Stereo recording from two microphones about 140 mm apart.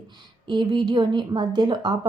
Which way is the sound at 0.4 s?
35° right (ahead or behind).